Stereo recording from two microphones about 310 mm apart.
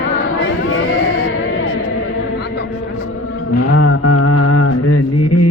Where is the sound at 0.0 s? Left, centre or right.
Left.